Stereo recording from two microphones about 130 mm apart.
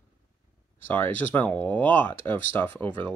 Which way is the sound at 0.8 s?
15° left (ahead or behind).